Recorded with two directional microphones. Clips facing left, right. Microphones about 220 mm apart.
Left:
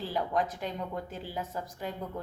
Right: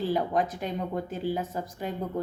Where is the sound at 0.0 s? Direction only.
20° right (ahead or behind).